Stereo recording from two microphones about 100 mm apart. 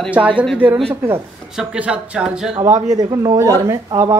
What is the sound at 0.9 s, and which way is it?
Speech, 25° right (ahead or behind).